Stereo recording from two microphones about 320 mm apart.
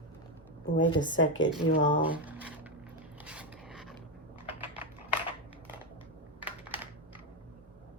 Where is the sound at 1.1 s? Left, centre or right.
Left.